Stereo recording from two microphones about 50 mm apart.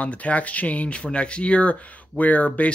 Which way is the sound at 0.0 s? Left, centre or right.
Left.